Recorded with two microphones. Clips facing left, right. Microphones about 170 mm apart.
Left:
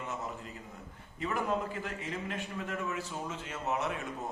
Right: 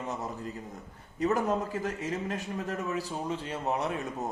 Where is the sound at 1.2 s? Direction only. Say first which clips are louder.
Right 5 dB; 40° right (ahead or behind).